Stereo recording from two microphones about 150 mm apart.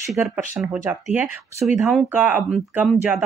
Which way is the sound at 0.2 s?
15° right (ahead or behind).